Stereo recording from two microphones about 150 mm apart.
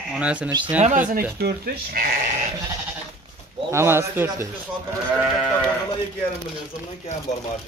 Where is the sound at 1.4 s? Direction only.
90° right.